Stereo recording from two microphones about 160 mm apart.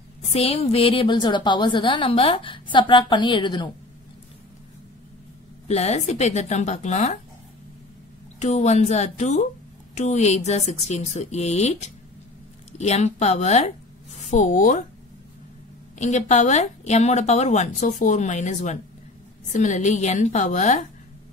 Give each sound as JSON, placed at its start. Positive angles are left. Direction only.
{"t": 0.2, "sound": "a woman's voice", "side_deg": 40}
{"t": 5.7, "sound": "speech", "side_deg": 45}
{"t": 8.4, "sound": "speech", "side_deg": 45}
{"t": 16.0, "sound": "speech", "side_deg": 45}